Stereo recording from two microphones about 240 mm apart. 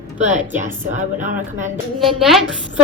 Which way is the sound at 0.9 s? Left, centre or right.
Right.